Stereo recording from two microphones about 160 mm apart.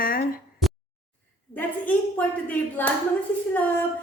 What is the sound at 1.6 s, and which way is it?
A woman's voice, 10° left (ahead or behind).